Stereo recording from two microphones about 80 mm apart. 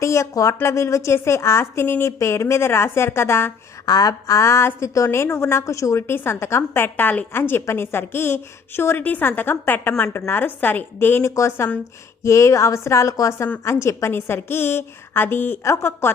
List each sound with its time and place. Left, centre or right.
0.0 s a woman's voice: left
3.8 s a woman's voice: left
11.2 s a woman's voice: left